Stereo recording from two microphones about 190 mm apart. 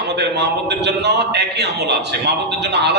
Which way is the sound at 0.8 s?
60° right (ahead or behind).